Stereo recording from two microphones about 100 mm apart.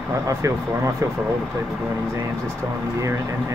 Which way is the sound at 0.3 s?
30° right (ahead or behind).